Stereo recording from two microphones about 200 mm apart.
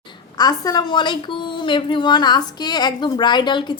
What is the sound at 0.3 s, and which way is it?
A woman's voice, 20° left (ahead or behind).